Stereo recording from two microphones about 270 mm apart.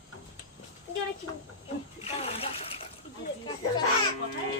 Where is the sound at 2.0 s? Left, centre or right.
Left.